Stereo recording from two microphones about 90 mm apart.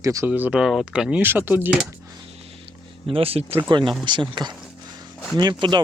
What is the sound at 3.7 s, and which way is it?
Speech, 60° right (ahead or behind).